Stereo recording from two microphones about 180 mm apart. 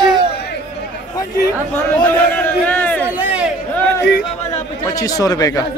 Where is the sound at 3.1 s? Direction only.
5° right (ahead or behind).